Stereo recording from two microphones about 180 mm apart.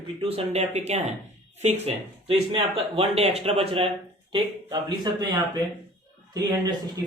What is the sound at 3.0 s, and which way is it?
A man's voice, 35° right (ahead or behind).